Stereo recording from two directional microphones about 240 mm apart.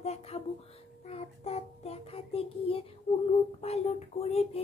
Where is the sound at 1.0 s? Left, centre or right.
Left.